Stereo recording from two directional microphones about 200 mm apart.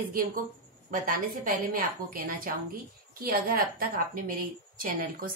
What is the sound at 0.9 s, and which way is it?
A woman's voice, 45° right (ahead or behind).